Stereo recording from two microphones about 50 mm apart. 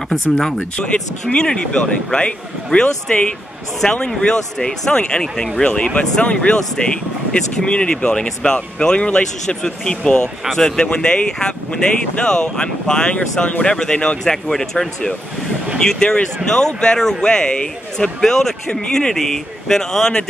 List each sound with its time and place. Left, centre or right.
0.1 s speech: centre
1.3 s speech: centre